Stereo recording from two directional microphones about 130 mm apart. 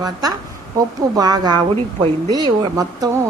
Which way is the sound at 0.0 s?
30° right (ahead or behind).